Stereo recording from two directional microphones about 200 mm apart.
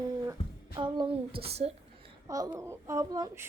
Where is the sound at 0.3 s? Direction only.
20° right (ahead or behind).